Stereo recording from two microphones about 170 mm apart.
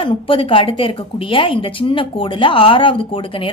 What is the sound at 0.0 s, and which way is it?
A woman's voice, 30° left (ahead or behind).